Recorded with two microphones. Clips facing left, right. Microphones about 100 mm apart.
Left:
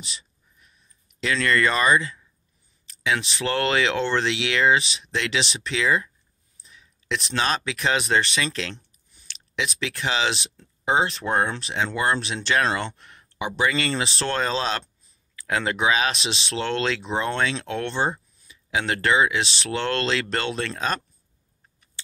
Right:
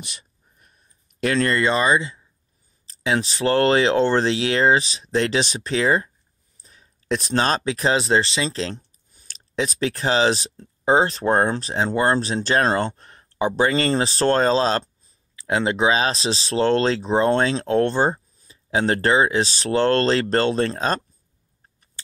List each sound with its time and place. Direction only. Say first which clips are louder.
0.0 s a sound: right 1 dB; 50° right (ahead or behind)
1.5 s speech: left 2 dB; 25° right (ahead or behind)
15.3 s speech: right 4 dB; 25° right (ahead or behind)